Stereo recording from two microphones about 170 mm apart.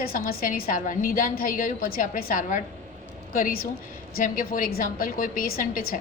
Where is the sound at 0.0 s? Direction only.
60° left (ahead or behind).